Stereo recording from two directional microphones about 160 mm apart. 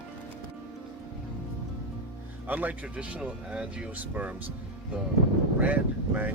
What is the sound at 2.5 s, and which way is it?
Speech, 10° right (ahead or behind).